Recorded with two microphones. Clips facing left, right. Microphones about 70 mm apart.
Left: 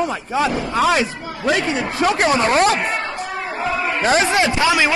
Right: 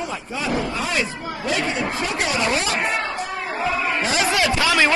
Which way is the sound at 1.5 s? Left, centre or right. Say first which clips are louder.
Left 2 dB; left.